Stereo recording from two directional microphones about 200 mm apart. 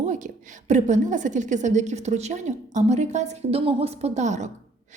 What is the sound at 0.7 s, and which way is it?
A woman's voice, 35° right (ahead or behind).